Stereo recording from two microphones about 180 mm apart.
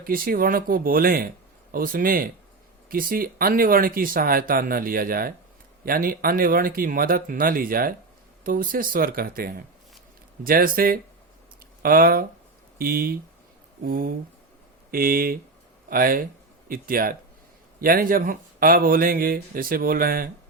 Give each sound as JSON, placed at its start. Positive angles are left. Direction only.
{"t": 0.0, "sound": "speech", "side_deg": -55}